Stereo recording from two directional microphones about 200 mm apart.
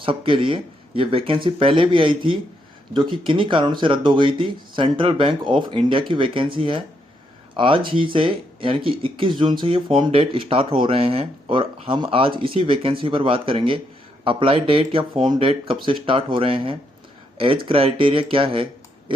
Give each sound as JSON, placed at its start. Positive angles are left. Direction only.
{"t": 0.0, "sound": "speech", "side_deg": -25}